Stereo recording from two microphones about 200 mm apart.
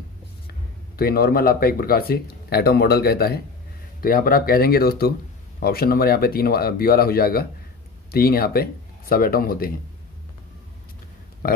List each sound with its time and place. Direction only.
0.9 s speech: 50° left (ahead or behind)
11.4 s speech: 45° left (ahead or behind)